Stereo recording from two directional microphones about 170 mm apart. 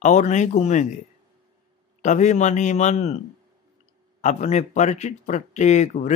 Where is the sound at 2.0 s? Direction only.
45° left (ahead or behind).